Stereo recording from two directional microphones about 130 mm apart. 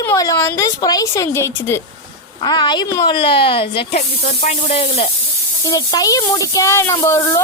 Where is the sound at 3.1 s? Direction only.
40° left (ahead or behind).